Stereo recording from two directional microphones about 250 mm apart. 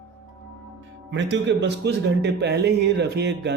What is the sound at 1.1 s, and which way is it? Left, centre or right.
Speech, right.